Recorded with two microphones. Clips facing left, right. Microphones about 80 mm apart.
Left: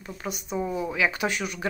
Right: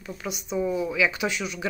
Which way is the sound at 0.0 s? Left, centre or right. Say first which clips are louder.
Even; left.